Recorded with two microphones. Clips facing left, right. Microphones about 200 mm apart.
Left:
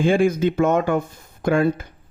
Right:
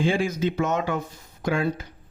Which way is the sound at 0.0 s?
55° left (ahead or behind).